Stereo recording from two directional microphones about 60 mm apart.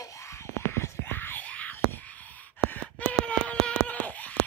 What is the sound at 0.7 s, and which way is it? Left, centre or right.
Whispering, left.